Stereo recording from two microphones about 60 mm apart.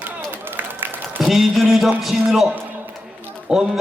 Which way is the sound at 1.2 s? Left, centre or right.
Centre.